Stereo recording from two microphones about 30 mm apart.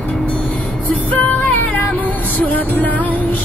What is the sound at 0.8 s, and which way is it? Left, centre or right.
Music, left.